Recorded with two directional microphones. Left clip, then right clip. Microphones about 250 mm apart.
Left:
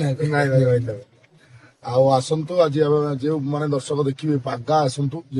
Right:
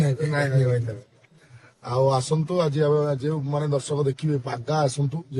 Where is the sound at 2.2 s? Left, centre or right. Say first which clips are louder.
Left 5 dB; centre.